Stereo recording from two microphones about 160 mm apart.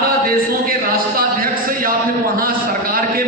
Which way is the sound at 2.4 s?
65° right (ahead or behind).